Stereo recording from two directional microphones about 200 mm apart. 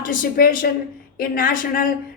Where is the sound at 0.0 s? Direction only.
45° left (ahead or behind).